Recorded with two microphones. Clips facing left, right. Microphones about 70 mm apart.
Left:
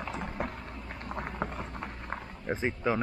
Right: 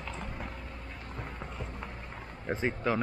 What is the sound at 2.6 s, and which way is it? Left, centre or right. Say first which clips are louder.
Speech: even; centre.